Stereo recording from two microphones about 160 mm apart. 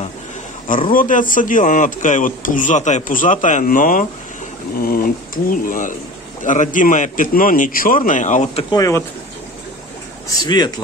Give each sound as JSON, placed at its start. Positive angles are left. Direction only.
{"t": 0.9, "sound": "speech", "side_deg": 55}
{"t": 4.8, "sound": "a man's voice", "side_deg": 65}
{"t": 8.6, "sound": "speech", "side_deg": 20}
{"t": 10.3, "sound": "speech", "side_deg": 25}